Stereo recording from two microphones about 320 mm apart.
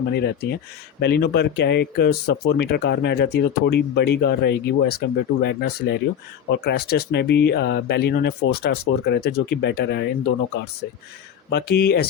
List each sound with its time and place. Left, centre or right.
0.1 s speech: left
11.5 s speech: left